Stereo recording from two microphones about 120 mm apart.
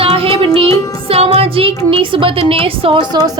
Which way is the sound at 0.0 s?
50° right (ahead or behind).